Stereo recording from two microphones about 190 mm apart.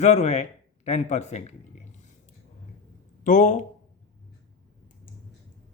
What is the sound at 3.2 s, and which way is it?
Speech, 40° left (ahead or behind).